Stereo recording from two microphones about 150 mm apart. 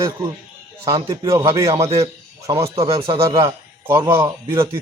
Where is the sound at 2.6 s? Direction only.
35° right (ahead or behind).